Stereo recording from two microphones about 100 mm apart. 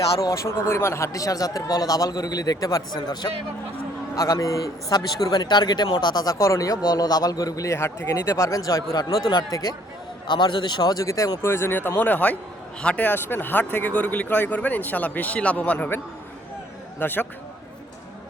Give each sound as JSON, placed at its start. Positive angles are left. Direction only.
{"t": 0.0, "sound": "speech", "side_deg": 35}
{"t": 4.2, "sound": "speech", "side_deg": 30}
{"t": 10.2, "sound": "a man's voice", "side_deg": 50}
{"t": 17.0, "sound": "speech", "side_deg": 20}